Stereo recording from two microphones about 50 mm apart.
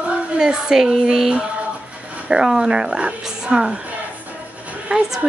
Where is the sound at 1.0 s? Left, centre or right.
Centre.